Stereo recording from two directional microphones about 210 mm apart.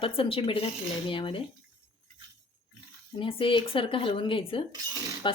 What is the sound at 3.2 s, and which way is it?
Speech, 25° left (ahead or behind).